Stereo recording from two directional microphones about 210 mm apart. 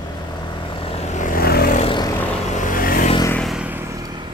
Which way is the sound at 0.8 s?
30° left (ahead or behind).